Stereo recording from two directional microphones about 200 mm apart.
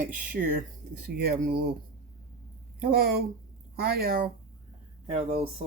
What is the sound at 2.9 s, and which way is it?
Speech, 50° right (ahead or behind).